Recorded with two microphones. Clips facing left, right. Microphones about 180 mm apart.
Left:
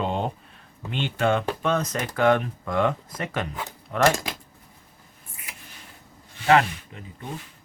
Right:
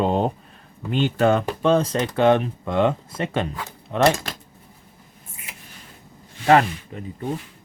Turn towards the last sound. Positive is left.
turn(degrees=-35)  # may be behind; listen again after turning